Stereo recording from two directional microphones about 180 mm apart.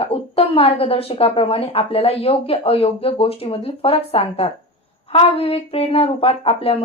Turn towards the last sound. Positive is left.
turn(degrees=30)  # may be behind; listen again after turning